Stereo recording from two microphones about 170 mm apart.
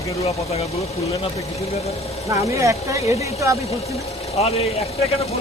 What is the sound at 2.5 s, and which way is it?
Speech, 20° right (ahead or behind).